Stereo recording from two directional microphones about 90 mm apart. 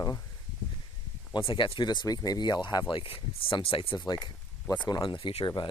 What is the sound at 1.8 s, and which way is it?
Speech, 55° left (ahead or behind).